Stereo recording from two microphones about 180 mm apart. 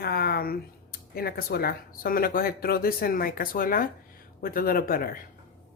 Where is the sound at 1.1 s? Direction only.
60° left (ahead or behind).